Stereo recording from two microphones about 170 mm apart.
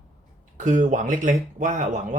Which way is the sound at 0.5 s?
50° right (ahead or behind).